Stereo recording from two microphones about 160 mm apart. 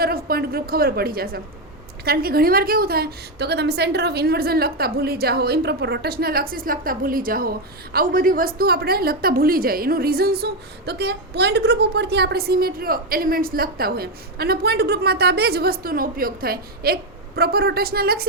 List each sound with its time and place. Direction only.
0.3 s a woman's voice: 70° right (ahead or behind)